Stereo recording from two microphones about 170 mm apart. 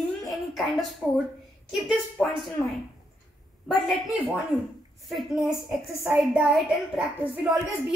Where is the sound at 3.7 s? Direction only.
Centre (ahead or behind).